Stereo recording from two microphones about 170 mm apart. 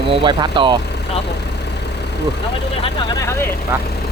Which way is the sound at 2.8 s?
25° left (ahead or behind).